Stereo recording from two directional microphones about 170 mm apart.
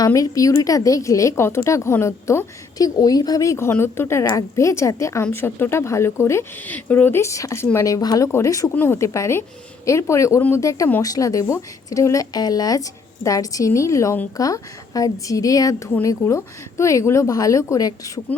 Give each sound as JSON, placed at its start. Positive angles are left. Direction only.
{"t": 0.0, "sound": "a woman's voice", "side_deg": 20}